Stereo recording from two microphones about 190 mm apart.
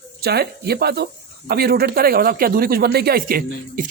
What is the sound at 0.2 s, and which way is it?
Speech, 55° right (ahead or behind).